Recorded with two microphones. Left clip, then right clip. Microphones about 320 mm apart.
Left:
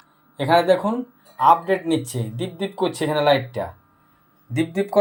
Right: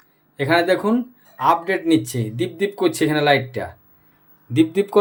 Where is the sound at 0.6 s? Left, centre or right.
Right.